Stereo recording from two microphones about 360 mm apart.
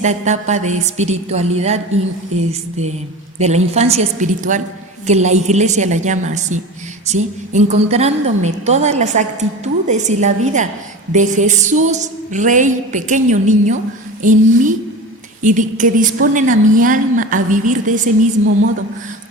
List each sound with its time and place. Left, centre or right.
0.0 s a woman's voice: centre